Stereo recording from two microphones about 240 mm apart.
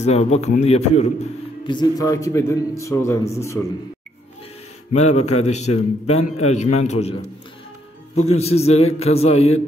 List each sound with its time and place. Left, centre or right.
0.0 s a man's voice: left; by 3.6 s centre
4.9 s a man's voice: left
8.4 s a man's voice: left